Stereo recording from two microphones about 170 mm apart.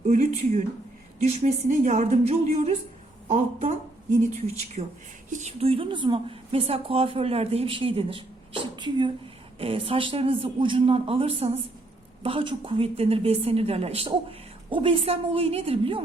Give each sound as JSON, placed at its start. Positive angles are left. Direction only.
{"t": 0.0, "sound": "a woman's voice", "side_deg": -45}